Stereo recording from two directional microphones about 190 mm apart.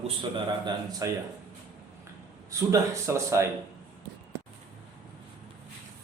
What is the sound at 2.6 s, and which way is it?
Speech, 15° right (ahead or behind).